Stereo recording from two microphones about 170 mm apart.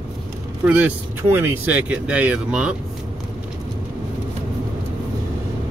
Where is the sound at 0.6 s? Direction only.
10° right (ahead or behind).